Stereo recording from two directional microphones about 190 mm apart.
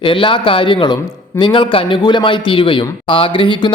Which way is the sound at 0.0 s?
25° left (ahead or behind).